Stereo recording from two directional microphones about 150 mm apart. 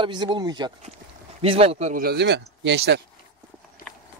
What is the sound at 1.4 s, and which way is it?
Speech, 40° right (ahead or behind).